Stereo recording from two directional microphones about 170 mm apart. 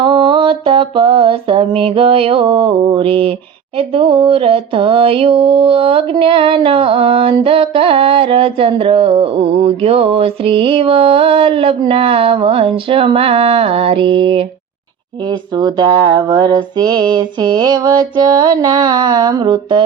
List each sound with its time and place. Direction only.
0.0 s mantra: 30° right (ahead or behind)